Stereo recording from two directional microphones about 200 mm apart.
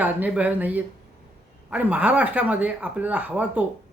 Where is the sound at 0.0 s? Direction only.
5° right (ahead or behind).